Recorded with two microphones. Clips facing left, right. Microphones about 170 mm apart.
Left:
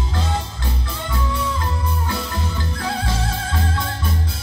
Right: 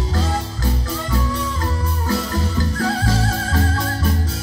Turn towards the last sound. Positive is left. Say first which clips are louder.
# right 4 dB
turn(degrees=-40)  # may be behind; listen again after turning